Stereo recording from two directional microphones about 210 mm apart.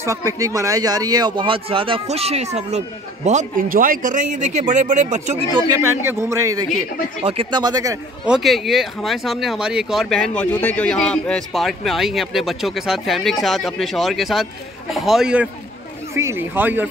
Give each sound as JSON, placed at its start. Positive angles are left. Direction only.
{"t": 0.0, "sound": "speech", "side_deg": -15}
{"t": 8.3, "sound": "speech", "side_deg": 0}